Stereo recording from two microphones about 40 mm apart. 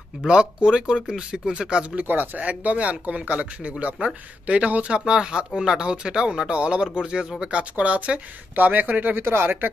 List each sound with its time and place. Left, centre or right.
0.3 s speech: right
2.0 s speech: right
4.8 s speech: right
9.2 s speech: right